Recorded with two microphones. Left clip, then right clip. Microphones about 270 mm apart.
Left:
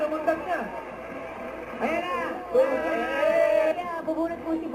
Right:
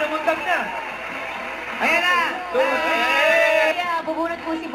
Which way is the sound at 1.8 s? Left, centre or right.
Centre.